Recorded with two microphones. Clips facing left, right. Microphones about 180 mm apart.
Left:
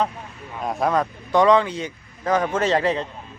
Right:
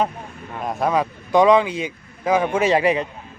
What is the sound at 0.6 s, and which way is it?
A man's voice, centre (ahead or behind).